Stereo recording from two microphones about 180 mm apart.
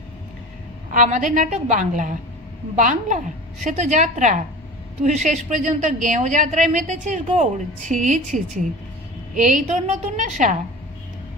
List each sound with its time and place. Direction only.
0.9 s a woman's voice: 45° right (ahead or behind)